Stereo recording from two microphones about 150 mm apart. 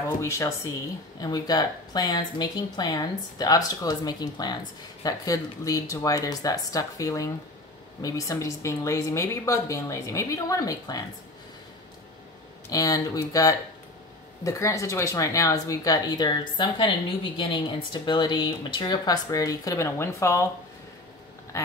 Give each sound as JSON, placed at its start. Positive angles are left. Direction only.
{"t": 0.2, "sound": "speech", "side_deg": 20}
{"t": 12.6, "sound": "speech", "side_deg": 25}
{"t": 21.5, "sound": "speech", "side_deg": 20}